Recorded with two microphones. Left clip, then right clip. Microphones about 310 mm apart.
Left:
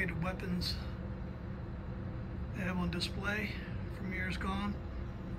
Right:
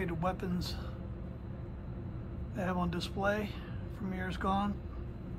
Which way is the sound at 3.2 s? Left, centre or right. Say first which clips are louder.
Right 7 dB; centre.